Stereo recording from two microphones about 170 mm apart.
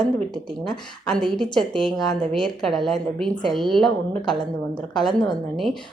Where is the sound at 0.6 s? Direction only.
5° left (ahead or behind).